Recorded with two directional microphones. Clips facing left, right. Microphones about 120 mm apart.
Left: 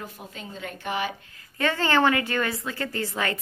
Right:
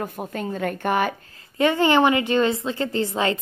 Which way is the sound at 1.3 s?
20° right (ahead or behind).